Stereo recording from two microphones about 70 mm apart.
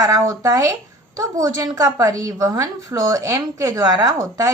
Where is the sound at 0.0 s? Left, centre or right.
Right.